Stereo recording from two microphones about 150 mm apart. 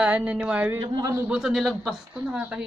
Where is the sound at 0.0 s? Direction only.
10° right (ahead or behind).